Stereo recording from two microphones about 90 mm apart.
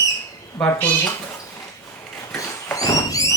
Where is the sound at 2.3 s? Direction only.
35° left (ahead or behind).